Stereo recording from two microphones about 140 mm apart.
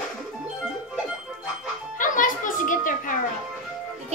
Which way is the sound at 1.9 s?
70° left (ahead or behind).